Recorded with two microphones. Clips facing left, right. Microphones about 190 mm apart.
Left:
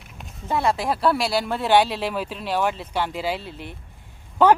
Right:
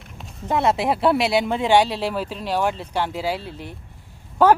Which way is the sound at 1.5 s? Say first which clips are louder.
Left 1 dB; 10° right (ahead or behind).